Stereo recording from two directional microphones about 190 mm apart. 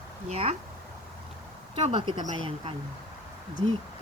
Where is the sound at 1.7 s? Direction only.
30° right (ahead or behind).